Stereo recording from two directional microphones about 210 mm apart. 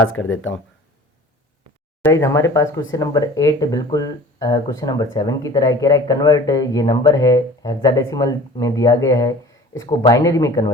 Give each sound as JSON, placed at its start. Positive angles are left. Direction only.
{"t": 0.1, "sound": "speech", "side_deg": 70}
{"t": 2.0, "sound": "speech", "side_deg": 15}